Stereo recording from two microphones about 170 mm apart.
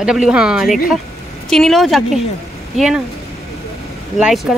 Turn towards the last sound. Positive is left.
turn(degrees=0)  # may be behind; listen again after turning